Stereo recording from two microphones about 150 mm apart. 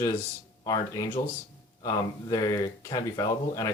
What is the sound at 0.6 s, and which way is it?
Speech, 25° left (ahead or behind).